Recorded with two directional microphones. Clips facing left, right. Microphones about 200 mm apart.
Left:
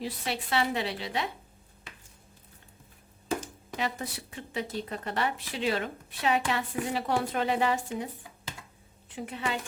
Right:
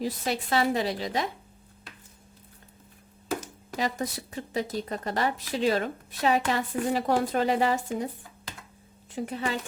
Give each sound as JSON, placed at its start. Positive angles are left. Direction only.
{"t": 0.0, "sound": "speech", "side_deg": -40}
{"t": 3.8, "sound": "speech", "side_deg": -40}
{"t": 9.1, "sound": "speech", "side_deg": -40}